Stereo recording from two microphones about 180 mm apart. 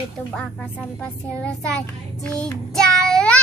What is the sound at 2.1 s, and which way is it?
Child singing, 5° left (ahead or behind).